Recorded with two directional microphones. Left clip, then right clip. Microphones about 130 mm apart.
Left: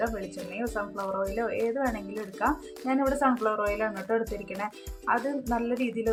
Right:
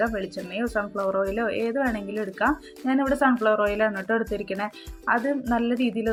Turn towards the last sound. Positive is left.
turn(degrees=-25)  # may be behind; listen again after turning